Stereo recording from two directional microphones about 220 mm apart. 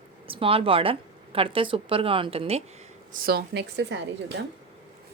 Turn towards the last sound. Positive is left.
turn(degrees=-50)  # may be behind; listen again after turning